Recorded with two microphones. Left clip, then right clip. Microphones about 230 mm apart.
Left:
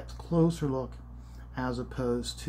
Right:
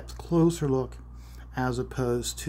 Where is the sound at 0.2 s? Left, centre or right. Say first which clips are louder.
Right 4 dB; right.